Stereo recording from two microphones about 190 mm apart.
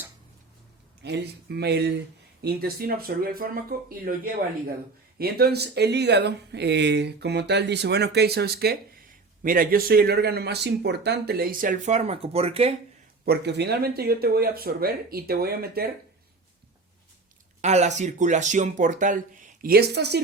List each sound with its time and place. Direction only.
1.0 s speech: 60° right (ahead or behind)
5.1 s speech: 55° right (ahead or behind); by 12.7 s 30° right (ahead or behind)
13.2 s speech: 60° right (ahead or behind)
17.6 s speech: 35° right (ahead or behind); by 20.2 s 60° right (ahead or behind)